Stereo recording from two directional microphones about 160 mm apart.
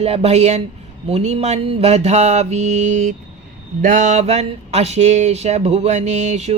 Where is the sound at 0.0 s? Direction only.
40° right (ahead or behind).